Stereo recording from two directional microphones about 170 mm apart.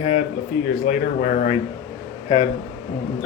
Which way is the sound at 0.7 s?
50° left (ahead or behind).